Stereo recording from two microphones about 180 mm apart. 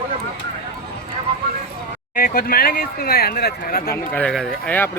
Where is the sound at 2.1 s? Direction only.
50° left (ahead or behind).